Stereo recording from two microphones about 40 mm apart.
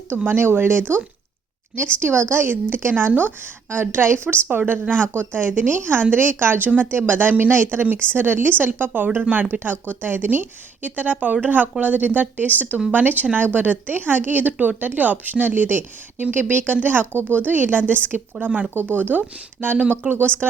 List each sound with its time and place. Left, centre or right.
0.3 s speech: right
1.7 s a woman's voice: right
2.3 s speech: right
3.1 s speech: right
3.7 s a woman's voice: right
4.4 s speech: right
5.1 s a woman's voice: right
8.0 s a woman's voice: right
18.3 s speech: right
18.7 s speech: right
18.9 s a woman's voice: right